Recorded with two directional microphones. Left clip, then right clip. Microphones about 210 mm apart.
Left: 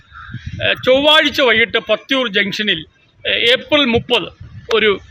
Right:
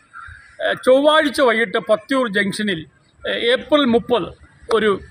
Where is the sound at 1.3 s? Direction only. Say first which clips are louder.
Left 3 dB; 25° left (ahead or behind).